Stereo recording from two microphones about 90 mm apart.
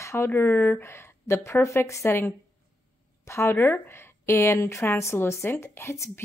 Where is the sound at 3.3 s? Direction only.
25° left (ahead or behind).